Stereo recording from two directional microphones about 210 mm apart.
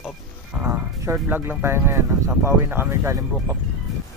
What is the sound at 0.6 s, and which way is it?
Speech, 10° right (ahead or behind).